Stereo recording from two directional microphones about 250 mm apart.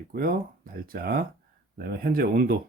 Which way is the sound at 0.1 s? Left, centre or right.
Right.